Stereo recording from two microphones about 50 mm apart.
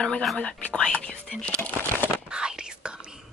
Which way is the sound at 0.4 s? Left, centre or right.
Left.